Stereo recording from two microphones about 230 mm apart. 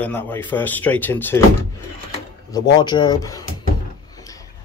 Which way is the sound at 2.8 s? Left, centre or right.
Centre.